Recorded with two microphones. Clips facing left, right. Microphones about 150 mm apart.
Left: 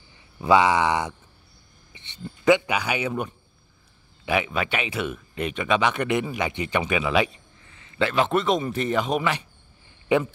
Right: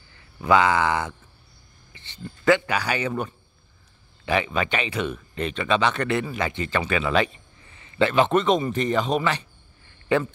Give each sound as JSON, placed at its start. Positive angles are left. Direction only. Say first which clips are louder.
{"t": 0.1, "sound": "speech", "louder": "left 1 dB", "side_deg": 20}
{"t": 7.1, "sound": "a man's voice", "louder": "even", "side_deg": 5}